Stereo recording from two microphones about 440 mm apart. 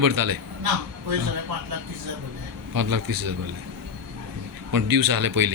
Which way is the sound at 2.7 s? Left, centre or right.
Right.